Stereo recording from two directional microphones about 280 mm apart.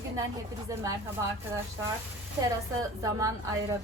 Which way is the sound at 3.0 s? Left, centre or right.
Centre.